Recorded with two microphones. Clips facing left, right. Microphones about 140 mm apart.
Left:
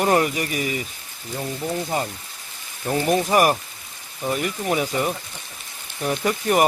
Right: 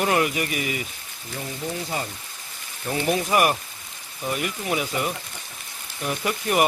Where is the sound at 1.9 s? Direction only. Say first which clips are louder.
Left 4 dB; 45° left (ahead or behind).